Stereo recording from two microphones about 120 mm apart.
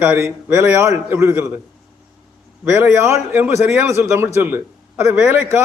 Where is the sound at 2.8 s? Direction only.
20° right (ahead or behind).